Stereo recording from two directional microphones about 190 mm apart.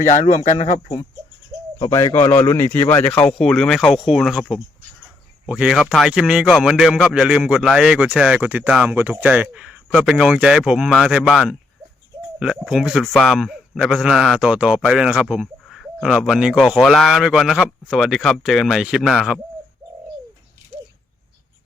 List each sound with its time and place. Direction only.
0.0 s speech: 40° left (ahead or behind)
1.8 s a man's voice: 15° left (ahead or behind); by 19.4 s centre (ahead or behind)